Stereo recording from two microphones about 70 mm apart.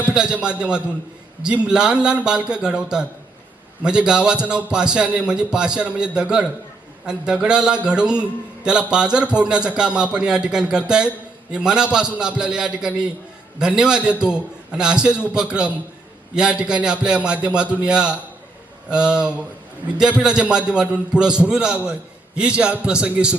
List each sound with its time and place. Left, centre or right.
0.1 s a man's voice: centre